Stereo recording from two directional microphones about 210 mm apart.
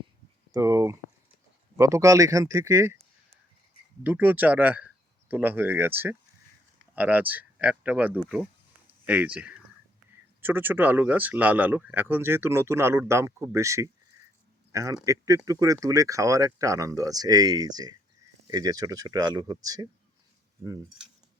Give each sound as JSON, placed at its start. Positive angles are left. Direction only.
{"t": 0.5, "sound": "speech", "side_deg": -15}
{"t": 4.0, "sound": "speech", "side_deg": -10}